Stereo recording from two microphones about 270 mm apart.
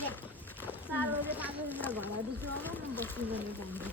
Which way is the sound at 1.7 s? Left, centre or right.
Centre.